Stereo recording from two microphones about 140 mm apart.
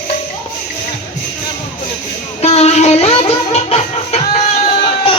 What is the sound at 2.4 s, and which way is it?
Music, 50° left (ahead or behind).